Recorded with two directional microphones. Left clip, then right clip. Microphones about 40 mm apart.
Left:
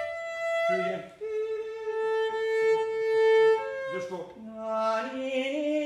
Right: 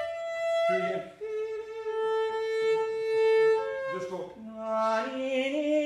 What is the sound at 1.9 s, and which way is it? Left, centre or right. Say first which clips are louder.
Violin: even; right.